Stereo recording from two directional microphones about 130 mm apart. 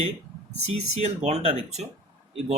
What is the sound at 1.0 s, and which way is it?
Speech, 55° right (ahead or behind).